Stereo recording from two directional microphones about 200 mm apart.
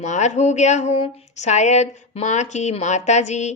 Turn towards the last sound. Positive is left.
turn(degrees=35)  # may be behind; listen again after turning